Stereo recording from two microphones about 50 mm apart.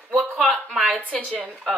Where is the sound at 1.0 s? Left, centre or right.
Left.